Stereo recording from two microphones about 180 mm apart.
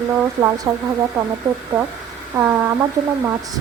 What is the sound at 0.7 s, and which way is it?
Speech, 15° right (ahead or behind).